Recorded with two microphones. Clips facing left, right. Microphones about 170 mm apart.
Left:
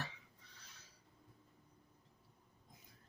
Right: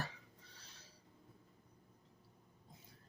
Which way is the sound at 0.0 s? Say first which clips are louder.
Right 2 dB; 35° right (ahead or behind).